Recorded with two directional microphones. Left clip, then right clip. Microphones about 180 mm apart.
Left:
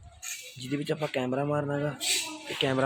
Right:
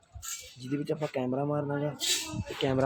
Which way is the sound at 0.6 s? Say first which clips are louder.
Left 1 dB; centre (ahead or behind).